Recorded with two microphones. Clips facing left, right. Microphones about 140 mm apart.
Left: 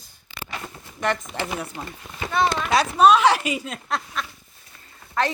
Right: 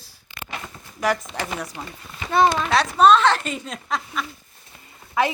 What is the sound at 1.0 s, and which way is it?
Speech, 5° right (ahead or behind).